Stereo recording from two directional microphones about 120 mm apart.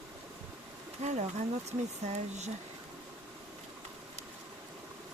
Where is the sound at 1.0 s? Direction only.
75° right (ahead or behind).